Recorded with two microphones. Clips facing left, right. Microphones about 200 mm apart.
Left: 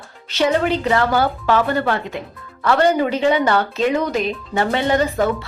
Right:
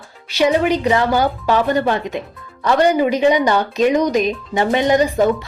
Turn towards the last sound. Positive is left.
turn(degrees=-15)  # may be behind; listen again after turning